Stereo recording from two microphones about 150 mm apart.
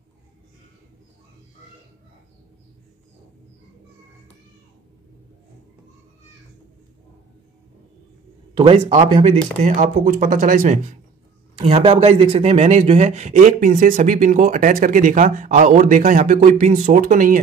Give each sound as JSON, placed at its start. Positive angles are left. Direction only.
{"t": 8.5, "sound": "speech", "side_deg": -35}
{"t": 9.6, "sound": "speech", "side_deg": -55}
{"t": 11.7, "sound": "speech", "side_deg": -40}